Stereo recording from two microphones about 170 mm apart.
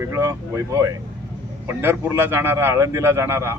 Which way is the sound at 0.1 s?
20° right (ahead or behind).